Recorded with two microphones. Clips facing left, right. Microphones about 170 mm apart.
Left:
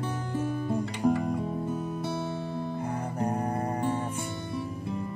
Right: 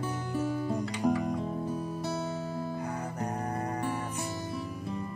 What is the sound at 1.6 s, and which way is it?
Music, 20° left (ahead or behind).